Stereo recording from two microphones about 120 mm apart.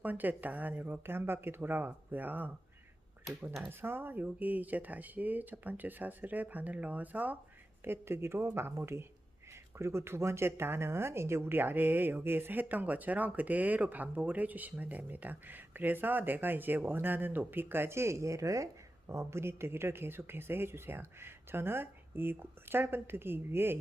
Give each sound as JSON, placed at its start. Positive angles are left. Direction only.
{"t": 0.0, "sound": "speech", "side_deg": -15}
{"t": 3.6, "sound": "speech", "side_deg": -20}